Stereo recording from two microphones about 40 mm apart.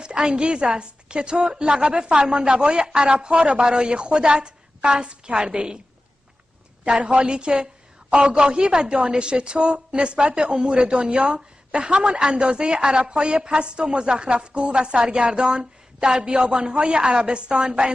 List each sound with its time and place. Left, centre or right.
0.0 s a woman's voice: right
6.8 s a woman's voice: right